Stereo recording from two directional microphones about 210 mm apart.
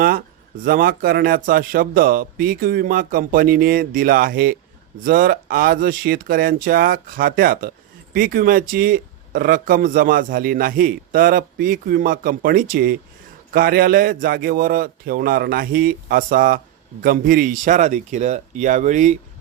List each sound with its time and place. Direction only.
0.6 s speech: 40° right (ahead or behind)